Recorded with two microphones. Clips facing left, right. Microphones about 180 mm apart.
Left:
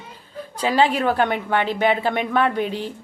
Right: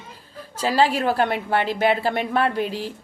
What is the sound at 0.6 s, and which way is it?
Speech, 35° right (ahead or behind).